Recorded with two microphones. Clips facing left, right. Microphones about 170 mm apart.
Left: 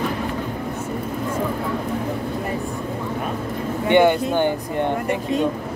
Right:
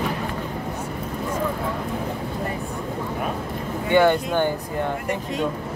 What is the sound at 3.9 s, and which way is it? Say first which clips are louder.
Speech: left 2 dB; 20° left (ahead or behind).